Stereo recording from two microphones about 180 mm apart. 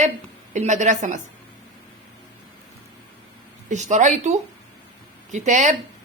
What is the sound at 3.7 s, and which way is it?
Speech, 40° right (ahead or behind).